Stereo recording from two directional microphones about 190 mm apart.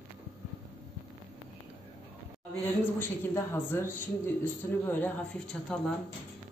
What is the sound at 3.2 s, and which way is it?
A man's voice, 15° left (ahead or behind).